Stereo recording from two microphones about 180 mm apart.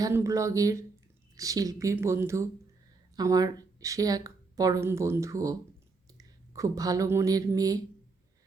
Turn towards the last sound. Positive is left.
turn(degrees=-20)  # may be behind; listen again after turning